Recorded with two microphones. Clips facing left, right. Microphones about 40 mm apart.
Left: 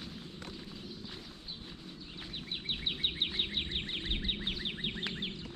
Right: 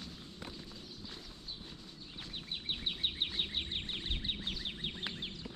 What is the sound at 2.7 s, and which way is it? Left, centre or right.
Bird vocalization, left.